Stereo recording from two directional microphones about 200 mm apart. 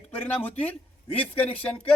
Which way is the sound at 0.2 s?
10° left (ahead or behind).